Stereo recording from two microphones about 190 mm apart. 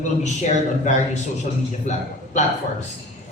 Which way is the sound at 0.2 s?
40° left (ahead or behind).